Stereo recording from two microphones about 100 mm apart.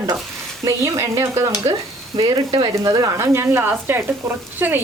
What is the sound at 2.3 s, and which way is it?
Speech, 45° right (ahead or behind).